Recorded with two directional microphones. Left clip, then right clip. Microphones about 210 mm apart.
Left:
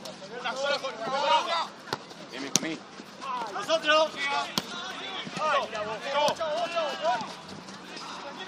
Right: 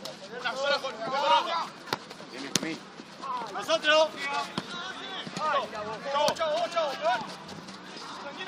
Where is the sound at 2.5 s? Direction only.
10° left (ahead or behind).